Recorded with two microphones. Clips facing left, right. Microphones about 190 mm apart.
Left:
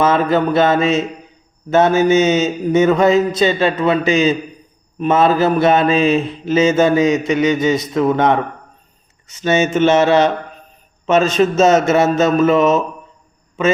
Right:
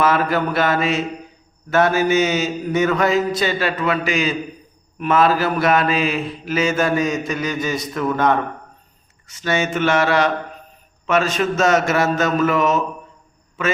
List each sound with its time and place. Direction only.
0.0 s mantra: 20° left (ahead or behind)
9.4 s mantra: 20° left (ahead or behind)